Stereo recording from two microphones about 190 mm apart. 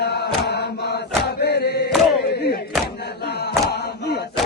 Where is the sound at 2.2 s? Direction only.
55° left (ahead or behind).